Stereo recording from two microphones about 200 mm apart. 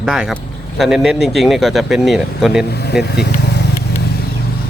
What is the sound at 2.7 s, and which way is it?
Speech, 55° left (ahead or behind).